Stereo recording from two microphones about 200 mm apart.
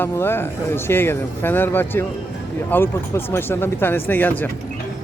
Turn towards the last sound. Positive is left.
turn(degrees=10)  # may be behind; listen again after turning